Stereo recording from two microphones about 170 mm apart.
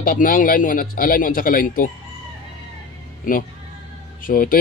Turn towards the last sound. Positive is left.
turn(degrees=55)  # may be behind; listen again after turning